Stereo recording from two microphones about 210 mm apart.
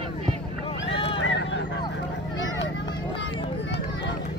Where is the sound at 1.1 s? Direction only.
60° left (ahead or behind).